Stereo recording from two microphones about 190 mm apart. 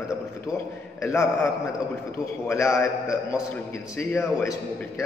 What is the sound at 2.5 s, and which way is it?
Speech, 15° left (ahead or behind).